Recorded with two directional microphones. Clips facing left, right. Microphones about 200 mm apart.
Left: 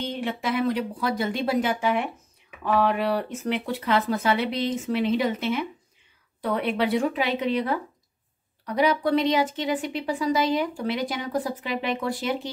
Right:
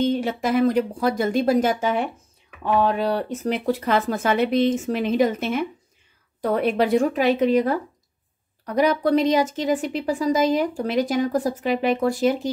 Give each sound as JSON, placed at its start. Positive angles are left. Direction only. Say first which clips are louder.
{"t": 0.1, "sound": "speech", "louder": "right 6 dB", "side_deg": -40}
{"t": 2.6, "sound": "speech", "louder": "right 2 dB", "side_deg": -30}